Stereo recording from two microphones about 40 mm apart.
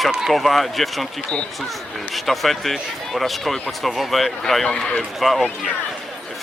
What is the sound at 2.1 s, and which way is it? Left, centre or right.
A man's voice, centre.